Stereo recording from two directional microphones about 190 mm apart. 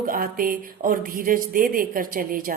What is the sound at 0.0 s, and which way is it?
A woman's voice, 50° right (ahead or behind).